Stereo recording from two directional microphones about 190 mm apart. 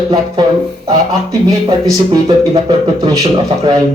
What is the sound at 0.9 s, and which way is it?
Speech, 20° right (ahead or behind).